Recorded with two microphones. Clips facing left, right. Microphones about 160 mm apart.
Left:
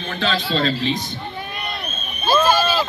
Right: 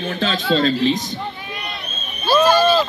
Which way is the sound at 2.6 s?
10° left (ahead or behind).